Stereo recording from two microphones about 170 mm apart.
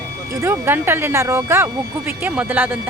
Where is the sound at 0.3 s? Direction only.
15° right (ahead or behind).